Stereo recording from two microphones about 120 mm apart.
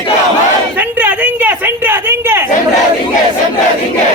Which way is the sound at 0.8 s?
15° right (ahead or behind).